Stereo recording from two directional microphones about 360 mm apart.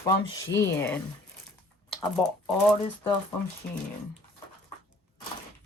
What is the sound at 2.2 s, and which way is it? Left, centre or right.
Speech, centre.